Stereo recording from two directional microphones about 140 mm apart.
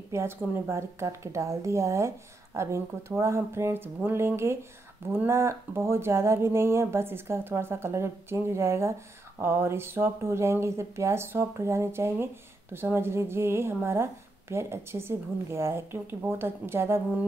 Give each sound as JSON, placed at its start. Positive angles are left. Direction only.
{"t": 0.1, "sound": "speech", "side_deg": -20}